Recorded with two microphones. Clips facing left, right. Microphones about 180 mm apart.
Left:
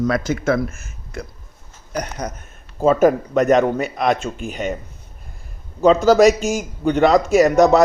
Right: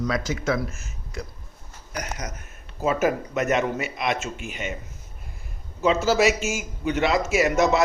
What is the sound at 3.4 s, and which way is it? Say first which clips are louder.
Speech: left 8 dB; 35° left (ahead or behind).